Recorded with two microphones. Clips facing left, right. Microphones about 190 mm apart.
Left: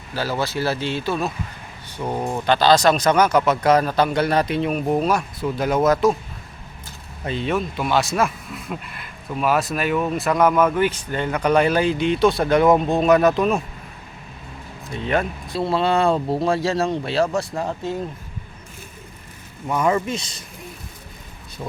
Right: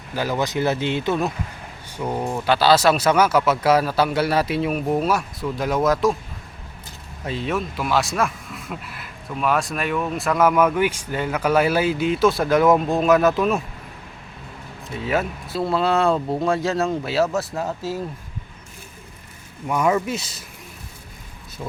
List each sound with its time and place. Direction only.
0.1 s speech: 15° right (ahead or behind)
2.0 s speech: 10° left (ahead or behind)
2.4 s a man's voice: 5° right (ahead or behind)
7.3 s a man's voice: centre (ahead or behind)
14.9 s a man's voice: 5° right (ahead or behind)
19.6 s speech: 5° right (ahead or behind)
21.6 s a man's voice: 5° left (ahead or behind)